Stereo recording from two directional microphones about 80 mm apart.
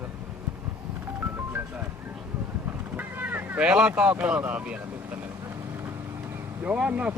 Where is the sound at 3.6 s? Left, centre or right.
Centre.